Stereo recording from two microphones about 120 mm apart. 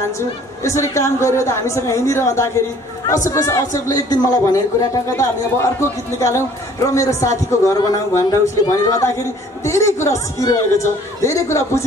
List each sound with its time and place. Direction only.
0.7 s a man's voice: 25° left (ahead or behind)